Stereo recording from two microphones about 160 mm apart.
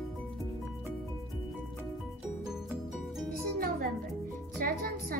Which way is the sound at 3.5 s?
65° right (ahead or behind).